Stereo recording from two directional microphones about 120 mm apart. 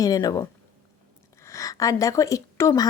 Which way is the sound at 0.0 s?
30° left (ahead or behind).